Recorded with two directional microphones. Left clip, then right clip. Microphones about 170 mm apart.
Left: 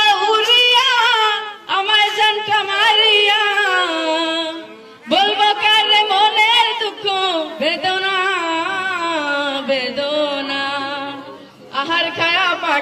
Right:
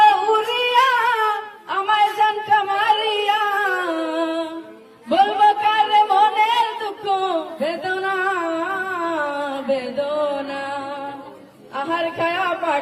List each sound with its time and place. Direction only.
0.0 s singing: 45° right (ahead or behind)
1.8 s music: 35° right (ahead or behind)
5.0 s a sound: 40° right (ahead or behind)